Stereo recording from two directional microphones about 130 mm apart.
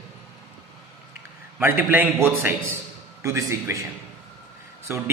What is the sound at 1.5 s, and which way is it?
A man's voice, 15° right (ahead or behind).